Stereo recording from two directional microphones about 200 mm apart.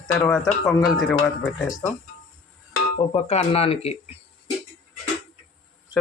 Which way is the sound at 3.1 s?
30° left (ahead or behind).